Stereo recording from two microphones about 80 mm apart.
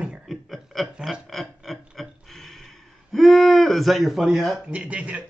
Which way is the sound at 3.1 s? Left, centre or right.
Centre.